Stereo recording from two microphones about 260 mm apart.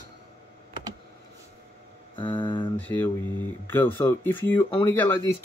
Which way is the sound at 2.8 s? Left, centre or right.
Centre.